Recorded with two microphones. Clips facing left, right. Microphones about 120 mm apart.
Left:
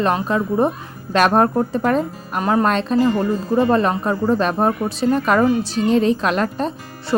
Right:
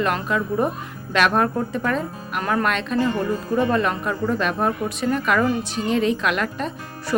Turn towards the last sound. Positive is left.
turn(degrees=35)  # may be behind; listen again after turning